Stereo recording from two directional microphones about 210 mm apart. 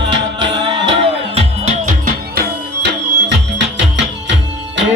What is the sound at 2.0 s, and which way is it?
Music, 50° right (ahead or behind).